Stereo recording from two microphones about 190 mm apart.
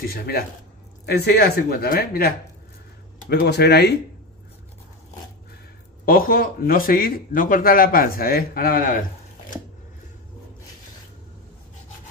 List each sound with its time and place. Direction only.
0.0 s speech: 55° left (ahead or behind)
3.3 s speech: 60° left (ahead or behind)
6.0 s speech: 50° left (ahead or behind)